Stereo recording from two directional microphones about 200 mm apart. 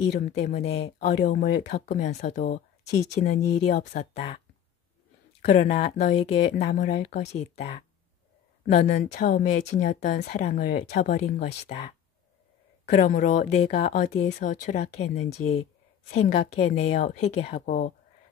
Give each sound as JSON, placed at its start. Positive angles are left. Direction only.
{"t": 0.3, "sound": "speech", "side_deg": 35}
{"t": 5.4, "sound": "speech", "side_deg": 35}
{"t": 8.7, "sound": "speech", "side_deg": 35}
{"t": 12.8, "sound": "speech", "side_deg": 40}